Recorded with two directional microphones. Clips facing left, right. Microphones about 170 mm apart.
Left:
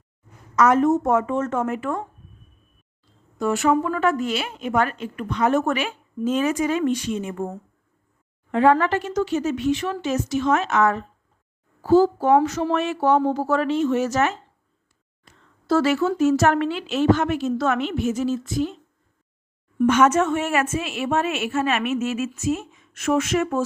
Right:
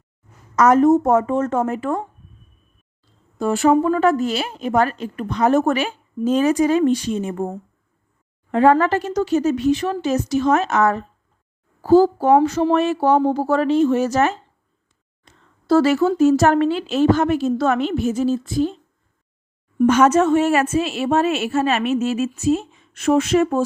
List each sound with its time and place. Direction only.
0.5 s a woman's voice: 40° right (ahead or behind)
3.3 s a woman's voice: 35° right (ahead or behind)
8.5 s a woman's voice: 40° right (ahead or behind)
15.6 s a woman's voice: 35° right (ahead or behind)
19.9 s a woman's voice: 35° right (ahead or behind)